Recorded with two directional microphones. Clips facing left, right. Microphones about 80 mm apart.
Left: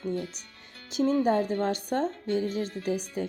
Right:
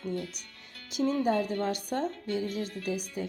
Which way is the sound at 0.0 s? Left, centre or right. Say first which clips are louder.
Left 3 dB; left.